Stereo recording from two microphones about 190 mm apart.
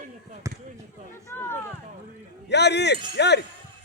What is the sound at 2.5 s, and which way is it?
Speech, 65° left (ahead or behind).